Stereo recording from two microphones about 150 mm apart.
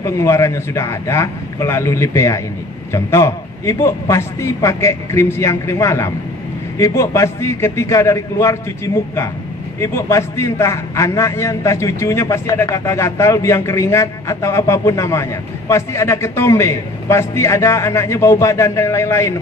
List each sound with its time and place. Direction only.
0.0 s a man's voice: 20° left (ahead or behind)